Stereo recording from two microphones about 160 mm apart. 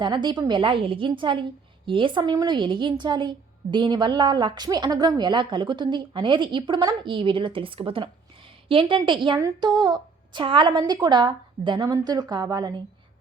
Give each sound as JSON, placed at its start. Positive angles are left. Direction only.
{"t": 0.0, "sound": "a woman's voice", "side_deg": -30}